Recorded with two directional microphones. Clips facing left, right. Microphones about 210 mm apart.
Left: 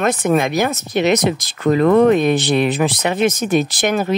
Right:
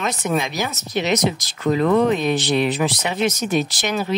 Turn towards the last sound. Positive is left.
turn(degrees=50)  # may be behind; listen again after turning